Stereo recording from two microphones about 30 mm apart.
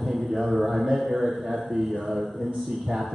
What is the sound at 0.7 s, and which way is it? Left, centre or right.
Mantra, centre.